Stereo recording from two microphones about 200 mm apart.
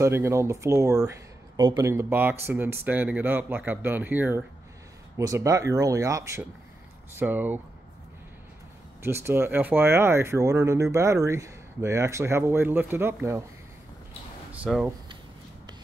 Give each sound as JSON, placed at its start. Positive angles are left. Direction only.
{"t": 0.0, "sound": "speech", "side_deg": -15}
{"t": 9.0, "sound": "speech", "side_deg": -10}
{"t": 14.5, "sound": "speech", "side_deg": -5}